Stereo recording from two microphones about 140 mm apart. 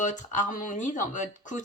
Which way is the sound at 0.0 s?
60° left (ahead or behind).